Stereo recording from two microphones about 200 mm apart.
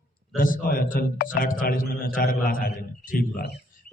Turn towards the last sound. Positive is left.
turn(degrees=45)  # may be behind; listen again after turning